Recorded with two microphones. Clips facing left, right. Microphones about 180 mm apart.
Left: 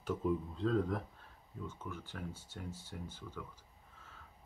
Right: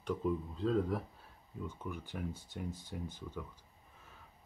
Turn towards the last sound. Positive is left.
turn(degrees=-15)  # may be behind; listen again after turning